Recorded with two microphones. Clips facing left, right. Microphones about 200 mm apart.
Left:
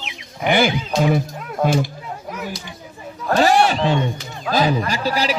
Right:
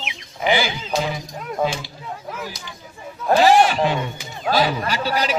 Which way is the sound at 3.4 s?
40° left (ahead or behind).